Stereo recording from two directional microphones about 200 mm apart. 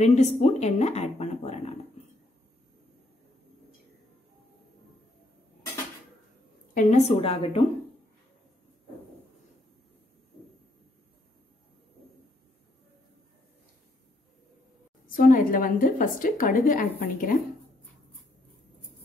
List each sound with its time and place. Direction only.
0.0 s a woman's voice: 35° left (ahead or behind)
6.7 s a woman's voice: 40° left (ahead or behind)
15.0 s a woman's voice: 45° left (ahead or behind)